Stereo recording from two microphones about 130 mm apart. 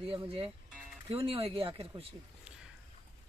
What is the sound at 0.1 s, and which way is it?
Speech, 45° right (ahead or behind).